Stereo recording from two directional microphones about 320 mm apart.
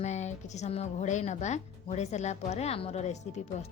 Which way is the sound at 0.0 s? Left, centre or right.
Left.